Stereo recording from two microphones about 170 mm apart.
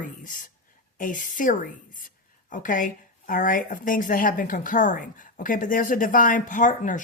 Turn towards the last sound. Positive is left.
turn(degrees=50)  # may be behind; listen again after turning